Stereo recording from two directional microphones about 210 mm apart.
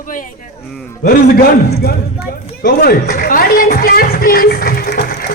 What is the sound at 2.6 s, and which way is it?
A man's voice, 50° left (ahead or behind).